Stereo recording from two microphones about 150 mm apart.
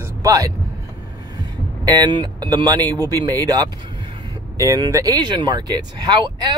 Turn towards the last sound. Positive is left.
turn(degrees=-30)  # may be behind; listen again after turning